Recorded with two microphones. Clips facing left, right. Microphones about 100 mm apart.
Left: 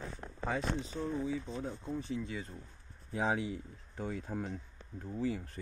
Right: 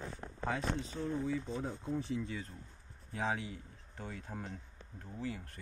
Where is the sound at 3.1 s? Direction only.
20° left (ahead or behind).